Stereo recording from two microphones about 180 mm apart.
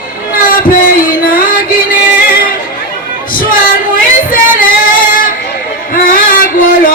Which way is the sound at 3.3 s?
50° left (ahead or behind).